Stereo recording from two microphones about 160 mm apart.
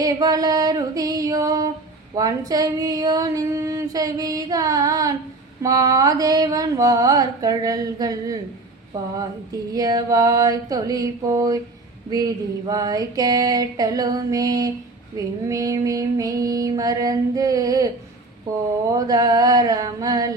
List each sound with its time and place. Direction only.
0.0 s female singing: 20° right (ahead or behind)
9.7 s female singing: 25° right (ahead or behind)